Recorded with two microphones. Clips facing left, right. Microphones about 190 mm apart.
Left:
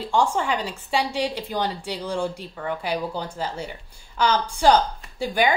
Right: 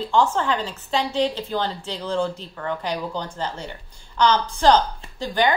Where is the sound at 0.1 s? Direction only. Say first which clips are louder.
Right 1 dB; 10° left (ahead or behind).